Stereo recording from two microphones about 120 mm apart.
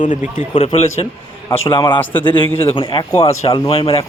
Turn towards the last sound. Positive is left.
turn(degrees=50)  # may be behind; listen again after turning